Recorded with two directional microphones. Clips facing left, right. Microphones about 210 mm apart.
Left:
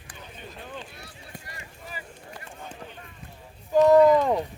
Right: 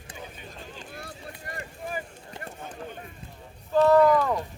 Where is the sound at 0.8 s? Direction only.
50° right (ahead or behind).